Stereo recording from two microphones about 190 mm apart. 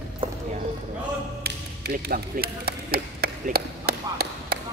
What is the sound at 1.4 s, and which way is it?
Tap, 55° right (ahead or behind).